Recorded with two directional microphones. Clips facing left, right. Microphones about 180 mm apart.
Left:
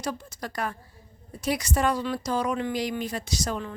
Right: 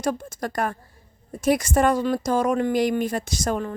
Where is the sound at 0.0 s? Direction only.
50° right (ahead or behind).